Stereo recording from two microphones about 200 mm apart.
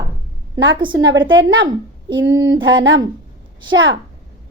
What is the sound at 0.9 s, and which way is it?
A woman's voice, 65° right (ahead or behind).